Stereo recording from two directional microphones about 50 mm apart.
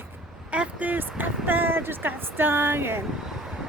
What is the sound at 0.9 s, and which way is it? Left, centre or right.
Speech, right.